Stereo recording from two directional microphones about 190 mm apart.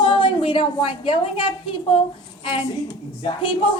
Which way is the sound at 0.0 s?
25° left (ahead or behind).